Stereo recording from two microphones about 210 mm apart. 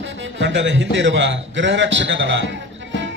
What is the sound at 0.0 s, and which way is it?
Music, 60° right (ahead or behind).